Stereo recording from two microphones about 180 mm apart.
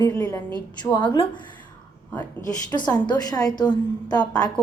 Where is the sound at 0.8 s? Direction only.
25° left (ahead or behind).